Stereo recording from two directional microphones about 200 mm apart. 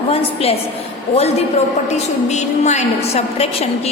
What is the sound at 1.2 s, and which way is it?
A woman's voice, 30° left (ahead or behind).